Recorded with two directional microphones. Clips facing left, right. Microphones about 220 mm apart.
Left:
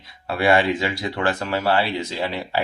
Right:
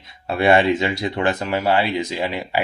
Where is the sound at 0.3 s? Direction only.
25° right (ahead or behind).